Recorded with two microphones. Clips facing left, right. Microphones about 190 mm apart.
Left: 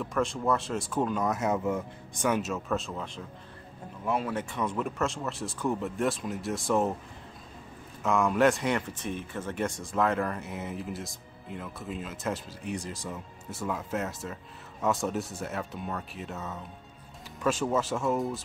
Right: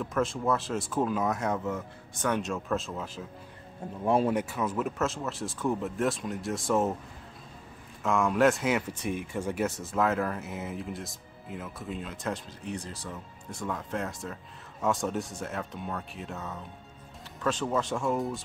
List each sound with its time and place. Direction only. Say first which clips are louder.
0.0 s speech: even; centre (ahead or behind)
4.0 s speech: right 5 dB; 30° right (ahead or behind)
4.3 s speech: right 3 dB; 10° right (ahead or behind)
8.0 s speech: even; centre (ahead or behind)